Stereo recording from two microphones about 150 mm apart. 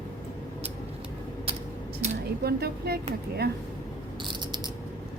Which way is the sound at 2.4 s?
90° right.